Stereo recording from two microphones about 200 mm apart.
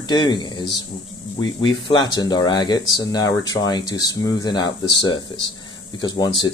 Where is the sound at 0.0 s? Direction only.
20° left (ahead or behind).